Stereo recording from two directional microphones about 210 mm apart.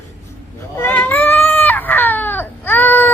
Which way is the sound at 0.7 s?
10° left (ahead or behind).